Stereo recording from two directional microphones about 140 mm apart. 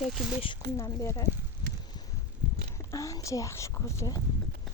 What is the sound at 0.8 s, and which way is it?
Speech, 20° left (ahead or behind).